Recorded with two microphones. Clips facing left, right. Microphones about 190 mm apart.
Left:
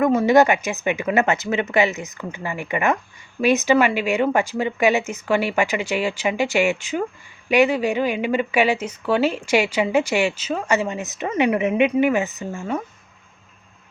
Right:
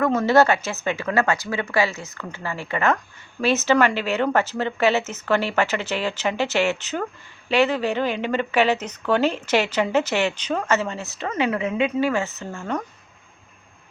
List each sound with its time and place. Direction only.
0.0 s speech: 15° left (ahead or behind)